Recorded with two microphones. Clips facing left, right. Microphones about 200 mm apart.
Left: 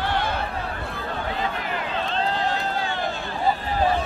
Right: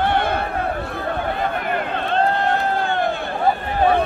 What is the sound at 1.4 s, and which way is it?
Run, 55° right (ahead or behind).